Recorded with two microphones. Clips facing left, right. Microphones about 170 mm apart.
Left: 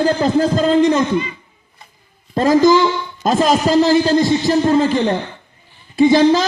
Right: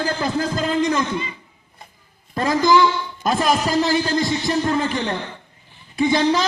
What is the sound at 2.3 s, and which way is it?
Music, 25° left (ahead or behind).